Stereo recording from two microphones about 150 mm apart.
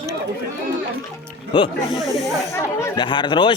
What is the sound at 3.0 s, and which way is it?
Speech, 30° left (ahead or behind).